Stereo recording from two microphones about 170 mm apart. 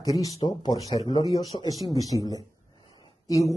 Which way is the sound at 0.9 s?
35° left (ahead or behind).